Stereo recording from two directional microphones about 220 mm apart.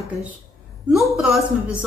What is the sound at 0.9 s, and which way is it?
Speech, centre (ahead or behind).